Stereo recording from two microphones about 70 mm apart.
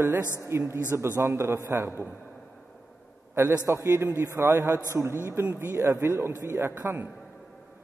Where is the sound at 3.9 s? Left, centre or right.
Right.